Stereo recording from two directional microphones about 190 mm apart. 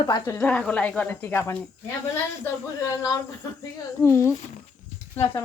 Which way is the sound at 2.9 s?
15° left (ahead or behind).